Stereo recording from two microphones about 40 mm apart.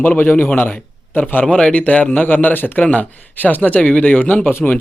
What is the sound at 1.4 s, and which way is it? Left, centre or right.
Speech, left.